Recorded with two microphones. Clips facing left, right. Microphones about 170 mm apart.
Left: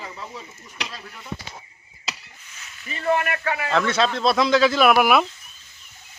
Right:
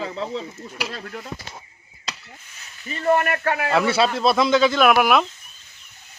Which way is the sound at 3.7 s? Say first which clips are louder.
Right 1 dB; 10° right (ahead or behind).